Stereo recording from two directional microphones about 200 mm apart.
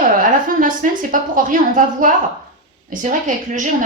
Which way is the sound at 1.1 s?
45° right (ahead or behind).